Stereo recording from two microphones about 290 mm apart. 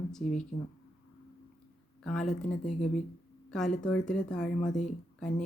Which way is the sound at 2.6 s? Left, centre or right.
Centre.